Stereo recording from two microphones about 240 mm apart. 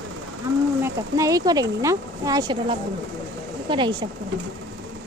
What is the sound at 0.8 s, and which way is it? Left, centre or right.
Speech, centre.